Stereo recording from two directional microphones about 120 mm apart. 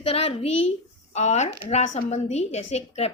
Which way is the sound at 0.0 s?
60° left (ahead or behind).